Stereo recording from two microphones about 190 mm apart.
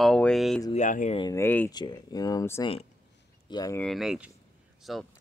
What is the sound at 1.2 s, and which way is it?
Speech, 15° left (ahead or behind).